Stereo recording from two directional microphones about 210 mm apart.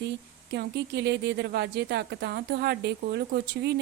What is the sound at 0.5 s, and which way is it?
A woman's voice, 50° right (ahead or behind).